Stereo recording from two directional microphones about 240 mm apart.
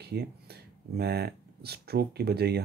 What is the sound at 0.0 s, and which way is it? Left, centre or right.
Speech, right.